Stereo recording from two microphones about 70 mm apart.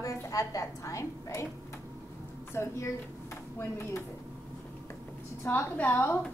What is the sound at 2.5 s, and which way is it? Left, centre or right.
A woman's voice, left.